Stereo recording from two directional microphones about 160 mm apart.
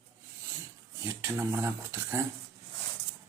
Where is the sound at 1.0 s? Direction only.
15° right (ahead or behind).